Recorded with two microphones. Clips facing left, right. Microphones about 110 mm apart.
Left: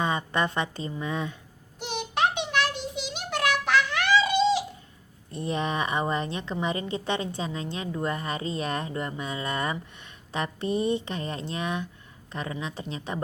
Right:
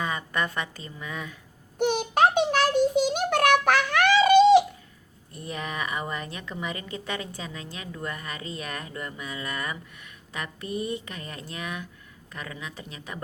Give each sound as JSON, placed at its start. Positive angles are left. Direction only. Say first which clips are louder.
{"t": 0.0, "sound": "a woman's voice", "louder": "left 3 dB", "side_deg": 25}
{"t": 1.8, "sound": "a sound", "louder": "right 6 dB", "side_deg": -50}
{"t": 5.3, "sound": "a woman's voice", "louder": "left 6 dB", "side_deg": 25}